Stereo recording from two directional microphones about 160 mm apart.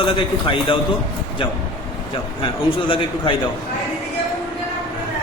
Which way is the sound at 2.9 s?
30° left (ahead or behind).